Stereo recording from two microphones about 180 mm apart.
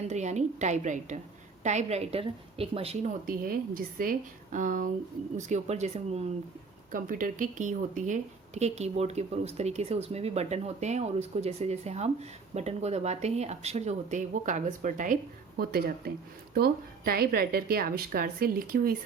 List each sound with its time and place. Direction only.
0.1 s a woman's voice: 40° right (ahead or behind)
3.2 s a woman's voice: 50° right (ahead or behind)
6.9 s a woman's voice: 50° right (ahead or behind)